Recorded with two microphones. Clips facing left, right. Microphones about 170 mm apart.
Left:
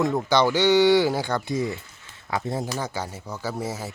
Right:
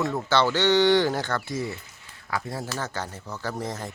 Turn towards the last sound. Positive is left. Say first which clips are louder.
# left 2 dB
turn(degrees=5)  # may be behind; listen again after turning